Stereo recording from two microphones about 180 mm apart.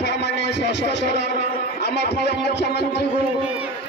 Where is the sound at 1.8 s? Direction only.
65° left (ahead or behind).